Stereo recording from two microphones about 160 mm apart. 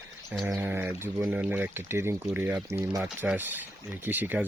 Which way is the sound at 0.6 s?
15° right (ahead or behind).